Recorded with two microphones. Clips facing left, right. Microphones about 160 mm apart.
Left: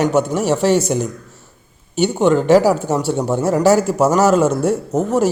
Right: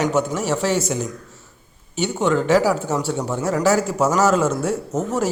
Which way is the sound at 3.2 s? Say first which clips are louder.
Left 6 dB; 35° left (ahead or behind).